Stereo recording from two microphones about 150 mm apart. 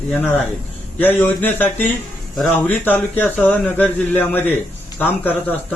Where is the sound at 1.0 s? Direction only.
10° left (ahead or behind).